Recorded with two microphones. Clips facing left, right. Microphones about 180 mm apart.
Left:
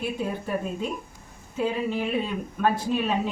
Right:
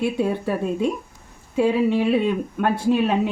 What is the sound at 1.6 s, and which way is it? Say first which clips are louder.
Speech: right 8 dB; 75° right (ahead or behind).